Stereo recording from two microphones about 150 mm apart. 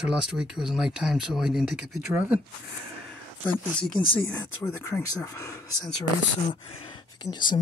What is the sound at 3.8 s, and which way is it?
Speech, 5° left (ahead or behind).